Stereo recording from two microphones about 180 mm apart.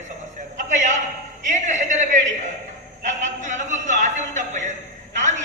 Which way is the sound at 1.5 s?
40° right (ahead or behind).